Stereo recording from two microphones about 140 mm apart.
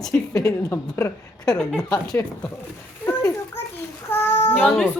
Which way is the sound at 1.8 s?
25° left (ahead or behind).